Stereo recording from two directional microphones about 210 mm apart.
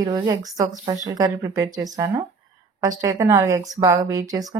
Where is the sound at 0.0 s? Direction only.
20° right (ahead or behind).